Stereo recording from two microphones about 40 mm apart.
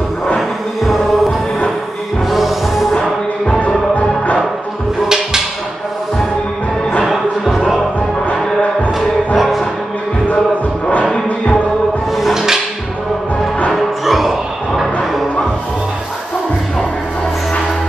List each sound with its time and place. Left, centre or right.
2.2 s music: centre
3.4 s music: left
5.0 s music: centre
7.1 s music: centre
9.4 s music: centre
12.2 s music: centre
13.7 s music: centre